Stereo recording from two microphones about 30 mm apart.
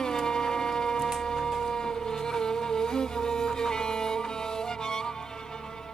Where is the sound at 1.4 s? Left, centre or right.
Centre.